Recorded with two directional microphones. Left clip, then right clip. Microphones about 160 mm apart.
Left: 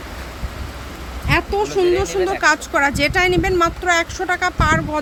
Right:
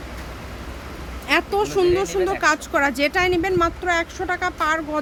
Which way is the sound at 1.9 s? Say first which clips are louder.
Left 2 dB; centre (ahead or behind).